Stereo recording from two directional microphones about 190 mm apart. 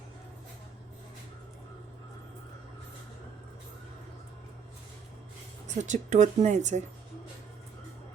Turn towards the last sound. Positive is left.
turn(degrees=-40)  # may be behind; listen again after turning